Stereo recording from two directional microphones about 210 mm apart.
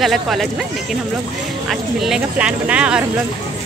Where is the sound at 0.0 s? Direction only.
Centre (ahead or behind).